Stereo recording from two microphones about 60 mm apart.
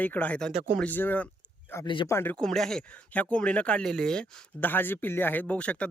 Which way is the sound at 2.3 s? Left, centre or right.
Centre.